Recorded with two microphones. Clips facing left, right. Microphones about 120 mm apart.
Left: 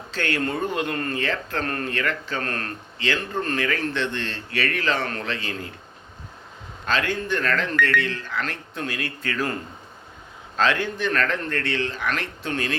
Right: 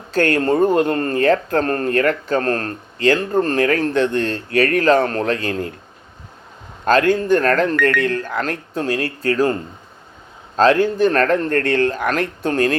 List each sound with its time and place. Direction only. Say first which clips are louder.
0.1 s speech: right 10 dB; 45° right (ahead or behind)
6.8 s speech: right 10 dB; 45° right (ahead or behind)
10.6 s speech: right 9 dB; 40° right (ahead or behind)